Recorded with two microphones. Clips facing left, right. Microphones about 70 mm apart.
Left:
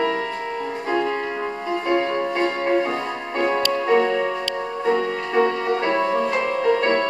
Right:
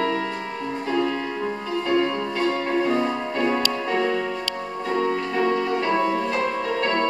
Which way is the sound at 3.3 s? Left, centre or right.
Left.